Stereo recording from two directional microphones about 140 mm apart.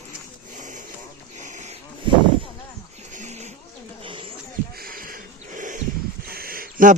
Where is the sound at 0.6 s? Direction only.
65° right (ahead or behind).